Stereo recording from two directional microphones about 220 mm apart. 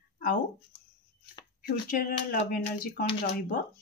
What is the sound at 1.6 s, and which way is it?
Speech, 40° left (ahead or behind).